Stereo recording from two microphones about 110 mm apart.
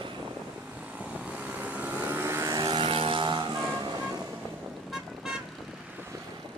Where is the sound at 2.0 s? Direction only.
20° right (ahead or behind).